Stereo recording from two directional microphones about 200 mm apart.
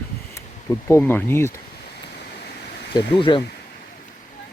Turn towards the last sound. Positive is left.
turn(degrees=25)  # may be behind; listen again after turning